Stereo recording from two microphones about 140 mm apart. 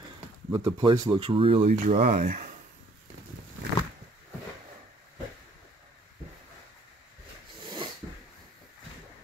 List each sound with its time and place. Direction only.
0.5 s speech: 35° right (ahead or behind); by 2.0 s 50° right (ahead or behind)
2.0 s speech: 80° right
7.6 s a sound: 35° right (ahead or behind)